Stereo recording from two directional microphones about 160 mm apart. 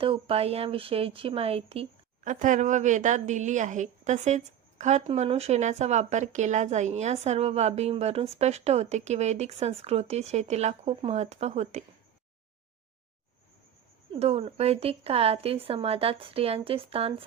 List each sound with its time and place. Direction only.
0.0 s a woman's voice: 35° right (ahead or behind)
2.2 s a woman's voice: 50° right (ahead or behind)
14.2 s a woman's voice: 40° right (ahead or behind)